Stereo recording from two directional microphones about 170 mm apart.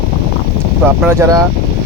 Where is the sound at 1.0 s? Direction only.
20° right (ahead or behind).